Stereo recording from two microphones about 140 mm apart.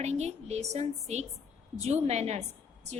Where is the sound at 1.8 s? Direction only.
50° right (ahead or behind).